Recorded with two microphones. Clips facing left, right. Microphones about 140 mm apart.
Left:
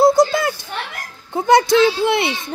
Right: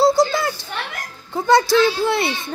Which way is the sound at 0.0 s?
20° left (ahead or behind).